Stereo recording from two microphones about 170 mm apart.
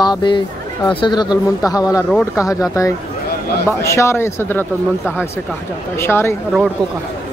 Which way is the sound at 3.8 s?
15° left (ahead or behind).